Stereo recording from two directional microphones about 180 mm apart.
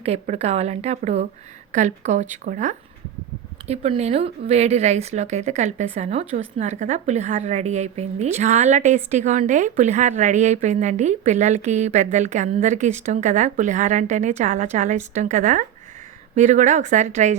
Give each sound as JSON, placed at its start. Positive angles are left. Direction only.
{"t": 0.0, "sound": "a woman's voice", "side_deg": -35}